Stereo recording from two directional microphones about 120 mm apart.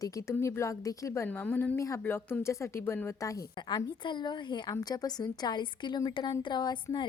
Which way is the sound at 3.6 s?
40° left (ahead or behind).